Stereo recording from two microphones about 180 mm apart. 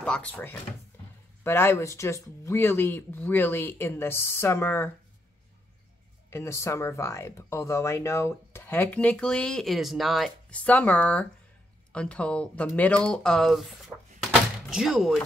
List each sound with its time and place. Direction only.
0.0 s speech: 5° left (ahead or behind)
6.3 s speech: 15° left (ahead or behind)
14.7 s speech: 5° right (ahead or behind)